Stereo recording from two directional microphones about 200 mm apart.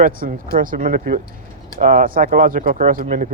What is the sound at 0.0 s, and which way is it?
Speech, 45° right (ahead or behind).